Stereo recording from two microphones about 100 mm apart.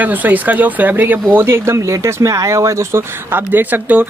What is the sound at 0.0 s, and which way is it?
Speech, 15° right (ahead or behind).